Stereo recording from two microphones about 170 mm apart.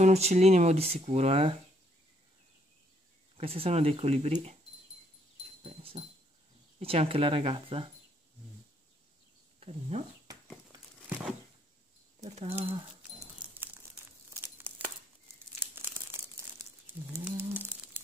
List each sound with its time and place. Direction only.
0.0 s speech: 40° right (ahead or behind)
3.3 s speech: 35° right (ahead or behind)
5.6 s dog: 35° right (ahead or behind)
6.8 s speech: 35° right (ahead or behind)
9.6 s speech: 40° right (ahead or behind)
12.2 s speech: 35° right (ahead or behind)
14.7 s a sound: 10° right (ahead or behind)
15.6 s crumpling: 15° right (ahead or behind)